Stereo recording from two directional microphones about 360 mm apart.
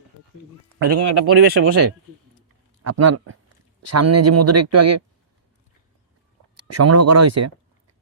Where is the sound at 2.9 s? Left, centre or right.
Right.